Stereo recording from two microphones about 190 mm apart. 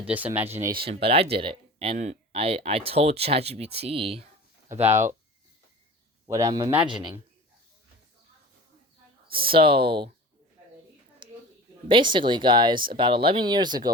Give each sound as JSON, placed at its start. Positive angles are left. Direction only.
{"t": 0.0, "sound": "speech", "side_deg": -10}
{"t": 0.9, "sound": "speech", "side_deg": -30}
{"t": 4.9, "sound": "speech", "side_deg": -15}
{"t": 6.2, "sound": "speech", "side_deg": -20}
{"t": 9.5, "sound": "speech", "side_deg": -25}
{"t": 11.9, "sound": "speech", "side_deg": -25}